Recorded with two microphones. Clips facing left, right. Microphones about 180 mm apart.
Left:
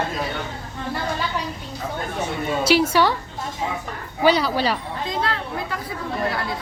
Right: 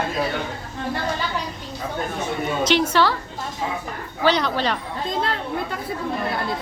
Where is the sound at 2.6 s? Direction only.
10° left (ahead or behind).